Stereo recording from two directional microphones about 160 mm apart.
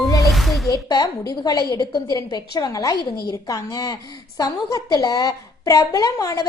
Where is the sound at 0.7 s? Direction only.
25° left (ahead or behind).